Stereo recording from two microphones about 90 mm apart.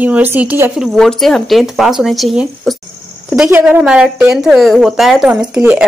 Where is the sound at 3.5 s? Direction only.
20° right (ahead or behind).